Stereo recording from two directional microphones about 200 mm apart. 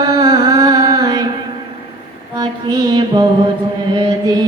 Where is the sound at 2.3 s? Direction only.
20° right (ahead or behind).